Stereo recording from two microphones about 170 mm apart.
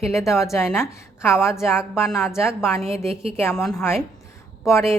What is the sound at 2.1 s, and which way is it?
Speech, centre (ahead or behind).